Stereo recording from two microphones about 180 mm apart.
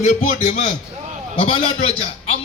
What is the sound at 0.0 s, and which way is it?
Speech, 40° left (ahead or behind).